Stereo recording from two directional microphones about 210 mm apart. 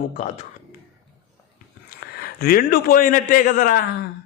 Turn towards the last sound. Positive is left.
turn(degrees=45)  # may be behind; listen again after turning